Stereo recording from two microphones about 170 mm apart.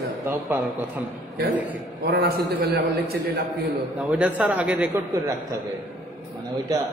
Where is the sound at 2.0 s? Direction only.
70° right (ahead or behind).